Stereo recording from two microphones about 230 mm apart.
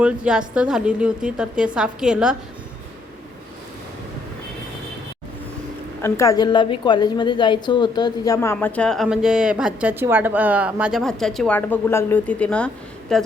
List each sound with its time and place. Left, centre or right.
0.0 s a woman's voice: centre
6.0 s a woman's voice: centre